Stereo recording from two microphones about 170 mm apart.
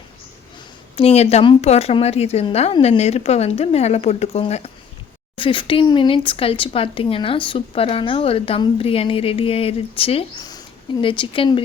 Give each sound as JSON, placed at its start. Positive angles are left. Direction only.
{"t": 0.9, "sound": "speech", "side_deg": 35}